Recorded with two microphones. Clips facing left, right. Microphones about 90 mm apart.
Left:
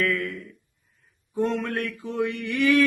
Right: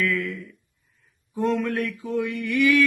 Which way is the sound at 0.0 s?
25° left (ahead or behind).